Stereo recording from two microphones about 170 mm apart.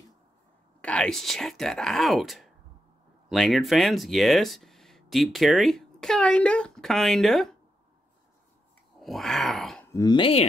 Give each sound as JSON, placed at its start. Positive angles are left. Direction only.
{"t": 0.7, "sound": "speech", "side_deg": 5}
{"t": 9.0, "sound": "groan", "side_deg": 0}
{"t": 9.9, "sound": "speech", "side_deg": 25}